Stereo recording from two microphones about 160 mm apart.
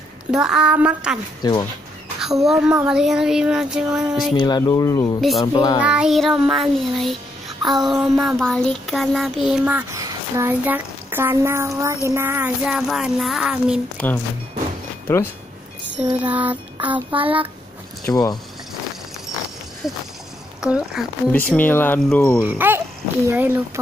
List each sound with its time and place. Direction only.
0.3 s child singing: 5° right (ahead or behind)
1.4 s speech: 25° left (ahead or behind)
2.1 s a child's voice: centre (ahead or behind)
2.9 s child singing: 5° right (ahead or behind)
4.4 s speech: 25° left (ahead or behind)
5.8 s child singing: 5° right (ahead or behind)
9.9 s speech: 20° right (ahead or behind); by 13.7 s 5° right (ahead or behind)
13.9 s speech: 10° left (ahead or behind)
16.2 s speech: 10° right (ahead or behind)
17.1 s child singing: 35° right (ahead or behind)
18.0 s speech: 25° left (ahead or behind)
19.8 s child singing: centre (ahead or behind)
21.3 s speech: 10° left (ahead or behind)
22.4 s speech: 10° right (ahead or behind)